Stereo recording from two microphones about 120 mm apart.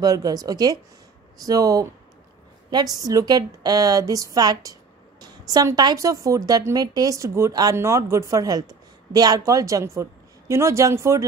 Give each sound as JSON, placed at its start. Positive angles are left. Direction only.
{"t": 0.0, "sound": "a woman's voice", "side_deg": -30}